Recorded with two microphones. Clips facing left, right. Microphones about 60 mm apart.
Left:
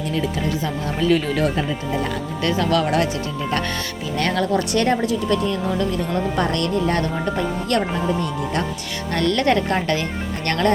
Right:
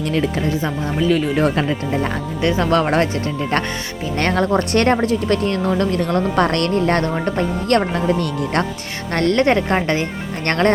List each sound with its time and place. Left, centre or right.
0.9 s speech: centre
1.9 s speech: right
4.2 s speech: right
7.9 s speech: right
9.1 s speech: right